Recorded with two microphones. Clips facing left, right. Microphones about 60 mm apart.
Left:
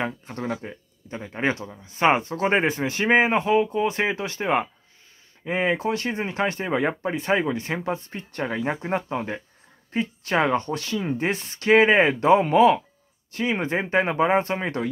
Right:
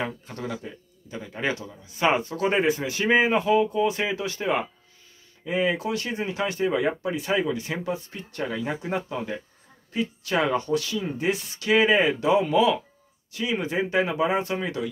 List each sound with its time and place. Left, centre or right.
0.0 s speech: left